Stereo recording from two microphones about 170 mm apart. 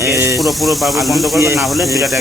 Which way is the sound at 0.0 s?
15° right (ahead or behind).